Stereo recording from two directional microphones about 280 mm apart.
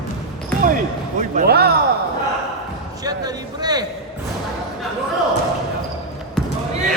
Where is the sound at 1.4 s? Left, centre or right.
Right.